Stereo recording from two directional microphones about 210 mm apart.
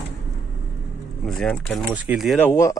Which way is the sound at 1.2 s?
Centre (ahead or behind).